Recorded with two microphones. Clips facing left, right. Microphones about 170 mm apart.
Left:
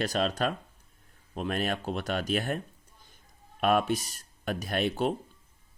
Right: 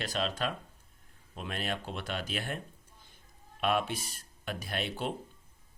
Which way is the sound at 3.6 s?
45° left (ahead or behind).